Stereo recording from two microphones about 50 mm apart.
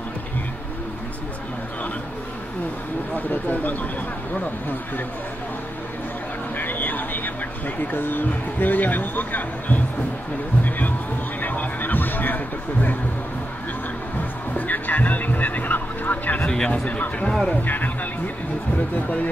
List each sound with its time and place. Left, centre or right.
3.2 s speech: left
6.5 s a sound: left
7.6 s speech: left
11.4 s music: left
14.5 s vehicle: left
16.4 s speech: centre; by 18.3 s left